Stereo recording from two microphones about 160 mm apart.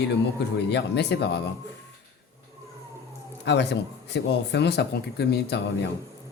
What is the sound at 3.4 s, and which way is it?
Speech, 90° left.